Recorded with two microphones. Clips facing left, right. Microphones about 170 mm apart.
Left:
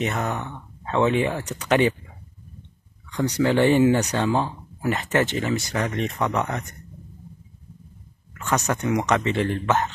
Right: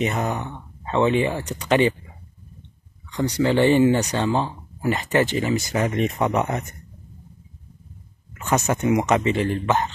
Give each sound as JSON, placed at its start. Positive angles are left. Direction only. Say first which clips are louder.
{"t": 0.1, "sound": "speech", "louder": "right 2 dB", "side_deg": -15}
{"t": 0.8, "sound": "speech", "louder": "right 1 dB", "side_deg": 0}
{"t": 3.1, "sound": "speech", "louder": "even", "side_deg": -10}
{"t": 3.4, "sound": "speech", "louder": "right 1 dB", "side_deg": 5}
{"t": 5.5, "sound": "speech", "louder": "right 3 dB", "side_deg": -20}
{"t": 8.4, "sound": "speech", "louder": "right 2 dB", "side_deg": -25}
{"t": 8.9, "sound": "speech", "louder": "right 2 dB", "side_deg": -5}